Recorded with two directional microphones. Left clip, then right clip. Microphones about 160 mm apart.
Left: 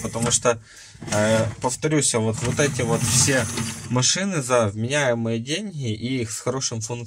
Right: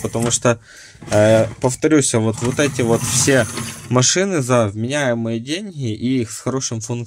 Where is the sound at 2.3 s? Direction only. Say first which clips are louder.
Right 4 dB; 40° right (ahead or behind).